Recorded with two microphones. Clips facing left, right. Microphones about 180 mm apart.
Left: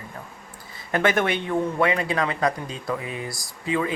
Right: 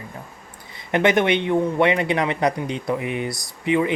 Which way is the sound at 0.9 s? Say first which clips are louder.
Right 4 dB; 20° right (ahead or behind).